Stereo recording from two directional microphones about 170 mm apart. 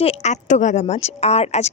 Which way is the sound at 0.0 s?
40° left (ahead or behind).